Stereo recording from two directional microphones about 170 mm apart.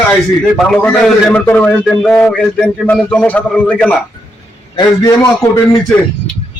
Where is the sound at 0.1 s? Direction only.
5° left (ahead or behind).